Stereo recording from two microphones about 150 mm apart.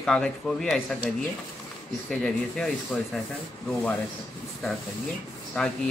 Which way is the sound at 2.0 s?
5° left (ahead or behind).